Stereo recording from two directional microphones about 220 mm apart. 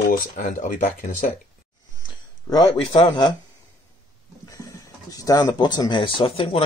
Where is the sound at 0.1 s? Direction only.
35° left (ahead or behind).